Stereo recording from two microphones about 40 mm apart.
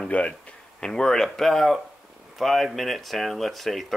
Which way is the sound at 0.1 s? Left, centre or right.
Left.